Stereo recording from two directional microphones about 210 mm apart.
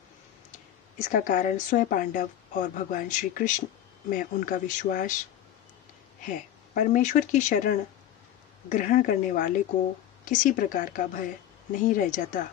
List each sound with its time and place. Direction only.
0.9 s speech: 40° left (ahead or behind)
6.2 s speech: 40° left (ahead or behind)